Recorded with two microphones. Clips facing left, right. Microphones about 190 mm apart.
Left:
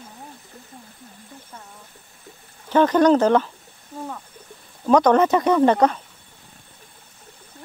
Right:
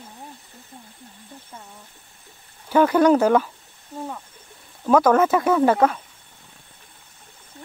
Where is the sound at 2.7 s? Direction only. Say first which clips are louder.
Even; 10° right (ahead or behind).